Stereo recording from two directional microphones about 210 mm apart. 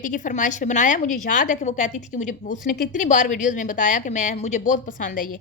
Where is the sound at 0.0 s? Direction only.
35° left (ahead or behind).